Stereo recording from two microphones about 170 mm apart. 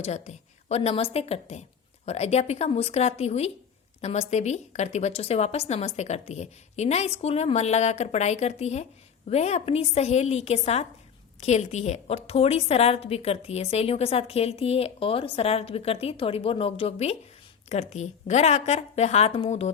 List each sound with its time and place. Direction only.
0.0 s a woman's voice: 40° left (ahead or behind)